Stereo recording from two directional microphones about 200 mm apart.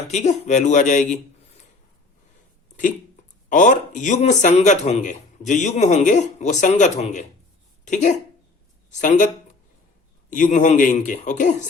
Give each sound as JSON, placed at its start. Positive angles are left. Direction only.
{"t": 0.1, "sound": "speech", "side_deg": 35}
{"t": 3.5, "sound": "speech", "side_deg": 40}